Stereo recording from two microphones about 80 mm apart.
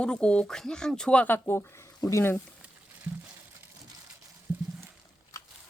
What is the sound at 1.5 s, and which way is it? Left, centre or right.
Speech, left.